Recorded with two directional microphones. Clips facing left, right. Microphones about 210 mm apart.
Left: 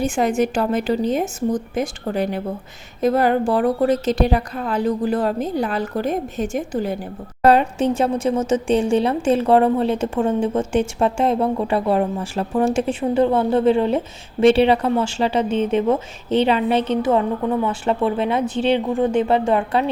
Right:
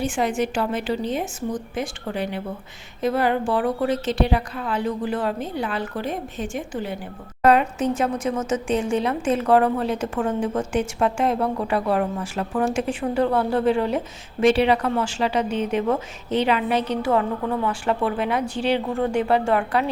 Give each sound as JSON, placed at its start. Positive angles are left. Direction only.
{"t": 0.0, "sound": "a woman's voice", "side_deg": 40}